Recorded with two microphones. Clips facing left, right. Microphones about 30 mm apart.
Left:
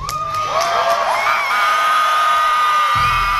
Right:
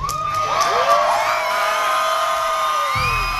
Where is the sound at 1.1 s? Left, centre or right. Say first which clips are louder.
Left 2 dB; left.